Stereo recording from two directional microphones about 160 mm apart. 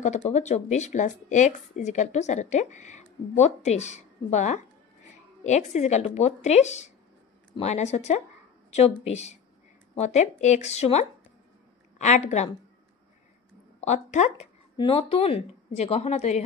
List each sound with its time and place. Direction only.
0.0 s speech: 45° left (ahead or behind)
13.7 s speech: 45° left (ahead or behind)
14.8 s speech: 35° left (ahead or behind)